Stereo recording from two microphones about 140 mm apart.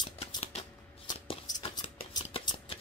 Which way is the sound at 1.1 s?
30° left (ahead or behind).